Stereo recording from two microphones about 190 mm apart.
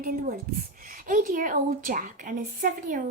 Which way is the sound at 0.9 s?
45° right (ahead or behind).